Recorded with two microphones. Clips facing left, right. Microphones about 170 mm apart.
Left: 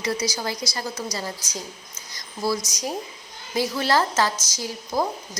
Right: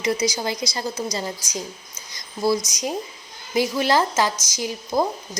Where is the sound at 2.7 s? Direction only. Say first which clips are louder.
Right 2 dB; 20° right (ahead or behind).